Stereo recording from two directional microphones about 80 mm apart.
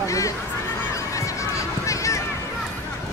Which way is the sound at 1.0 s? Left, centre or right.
Left.